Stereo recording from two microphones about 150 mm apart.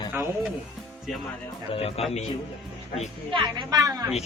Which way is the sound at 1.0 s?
Centre (ahead or behind).